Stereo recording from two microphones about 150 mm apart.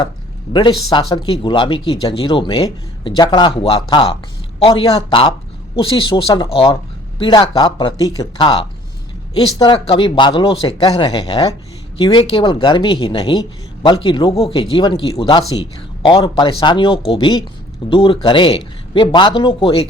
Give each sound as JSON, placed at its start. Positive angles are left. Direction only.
{"t": 0.5, "sound": "speech", "side_deg": 30}
{"t": 8.4, "sound": "speech", "side_deg": 35}